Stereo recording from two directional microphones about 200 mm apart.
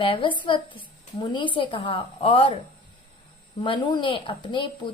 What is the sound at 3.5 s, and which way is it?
A woman's voice, 25° left (ahead or behind).